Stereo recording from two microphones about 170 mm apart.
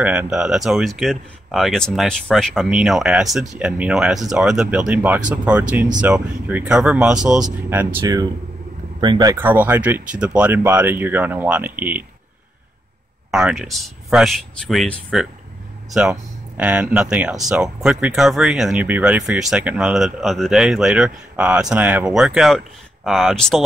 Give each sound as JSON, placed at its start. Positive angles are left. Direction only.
{"t": 0.0, "sound": "speech", "side_deg": -10}
{"t": 8.0, "sound": "speech", "side_deg": -20}
{"t": 13.3, "sound": "speech", "side_deg": -5}